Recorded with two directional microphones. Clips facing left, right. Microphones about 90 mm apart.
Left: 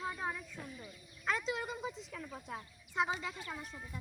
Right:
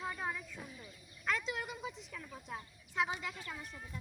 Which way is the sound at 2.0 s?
30° left (ahead or behind).